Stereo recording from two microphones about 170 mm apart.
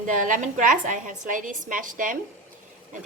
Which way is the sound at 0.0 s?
50° right (ahead or behind).